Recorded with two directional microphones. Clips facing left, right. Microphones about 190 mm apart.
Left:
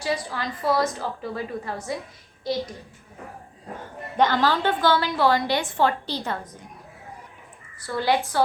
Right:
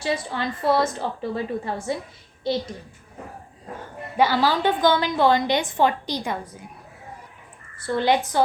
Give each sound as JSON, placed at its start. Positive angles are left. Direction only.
{"t": 0.0, "sound": "a woman's voice", "side_deg": -25}
{"t": 4.2, "sound": "a woman's voice", "side_deg": -10}
{"t": 7.9, "sound": "a woman's voice", "side_deg": -20}